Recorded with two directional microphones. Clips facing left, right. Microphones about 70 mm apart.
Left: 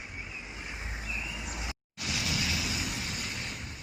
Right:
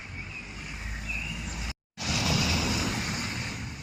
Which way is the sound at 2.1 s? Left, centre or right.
Right.